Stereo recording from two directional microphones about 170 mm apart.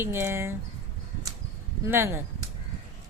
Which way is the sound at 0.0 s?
15° right (ahead or behind).